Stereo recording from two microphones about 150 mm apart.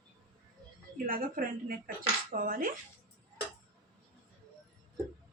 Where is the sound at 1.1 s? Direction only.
65° right (ahead or behind).